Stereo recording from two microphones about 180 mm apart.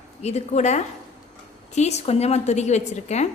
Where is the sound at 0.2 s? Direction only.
40° left (ahead or behind).